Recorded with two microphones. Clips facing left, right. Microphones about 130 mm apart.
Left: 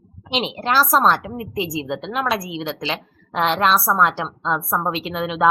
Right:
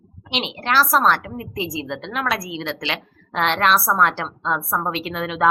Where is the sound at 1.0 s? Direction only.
20° left (ahead or behind).